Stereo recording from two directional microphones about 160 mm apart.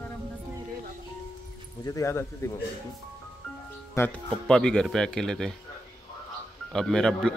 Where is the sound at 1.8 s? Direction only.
20° left (ahead or behind).